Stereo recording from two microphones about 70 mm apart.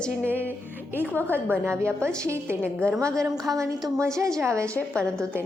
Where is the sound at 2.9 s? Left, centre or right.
Right.